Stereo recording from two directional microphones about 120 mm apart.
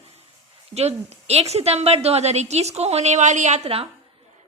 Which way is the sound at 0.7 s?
60° right (ahead or behind).